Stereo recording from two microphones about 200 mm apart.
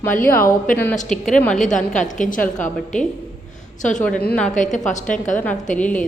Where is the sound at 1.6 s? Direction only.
40° left (ahead or behind).